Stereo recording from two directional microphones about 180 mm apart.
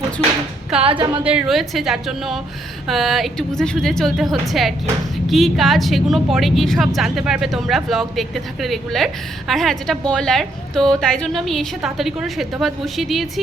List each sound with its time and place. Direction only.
0.8 s a woman's voice: 30° right (ahead or behind)
1.2 s a woman's voice: 5° right (ahead or behind)